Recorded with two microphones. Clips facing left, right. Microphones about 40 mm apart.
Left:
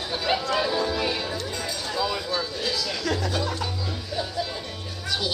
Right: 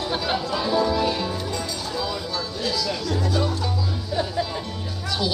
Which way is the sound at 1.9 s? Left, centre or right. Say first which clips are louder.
Left 2 dB; centre.